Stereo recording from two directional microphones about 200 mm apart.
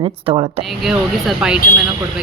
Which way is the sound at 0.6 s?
Centre (ahead or behind).